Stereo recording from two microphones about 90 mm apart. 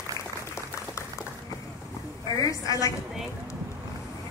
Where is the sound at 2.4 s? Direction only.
40° left (ahead or behind).